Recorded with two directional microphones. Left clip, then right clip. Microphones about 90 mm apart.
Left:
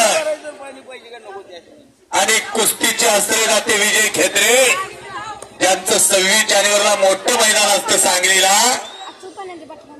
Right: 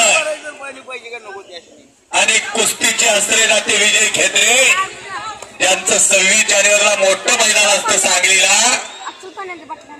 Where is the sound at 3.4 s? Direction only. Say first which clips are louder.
Right 2 dB; 55° left (ahead or behind).